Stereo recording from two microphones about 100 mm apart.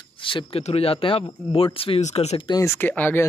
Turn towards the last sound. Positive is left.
turn(degrees=20)  # may be behind; listen again after turning